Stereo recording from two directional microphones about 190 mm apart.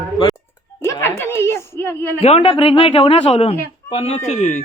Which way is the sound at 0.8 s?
15° left (ahead or behind).